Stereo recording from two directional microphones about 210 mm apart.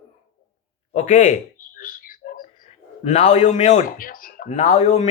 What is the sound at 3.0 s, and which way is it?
Speech, 35° left (ahead or behind).